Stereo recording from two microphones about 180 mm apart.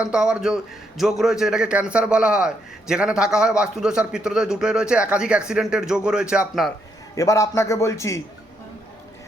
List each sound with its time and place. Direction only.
0.0 s a man's voice: 5° right (ahead or behind)
7.2 s a man's voice: 15° left (ahead or behind)